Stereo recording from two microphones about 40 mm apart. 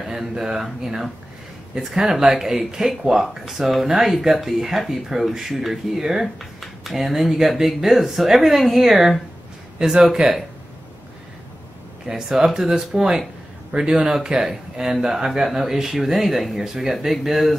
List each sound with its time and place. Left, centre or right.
0.0 s a sound: centre
0.4 s speech: centre
12.1 s speech: centre